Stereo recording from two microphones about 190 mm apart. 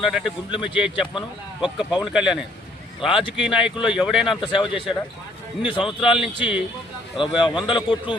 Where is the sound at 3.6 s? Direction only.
5° right (ahead or behind).